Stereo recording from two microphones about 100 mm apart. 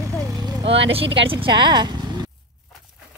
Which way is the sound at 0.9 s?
65° right (ahead or behind).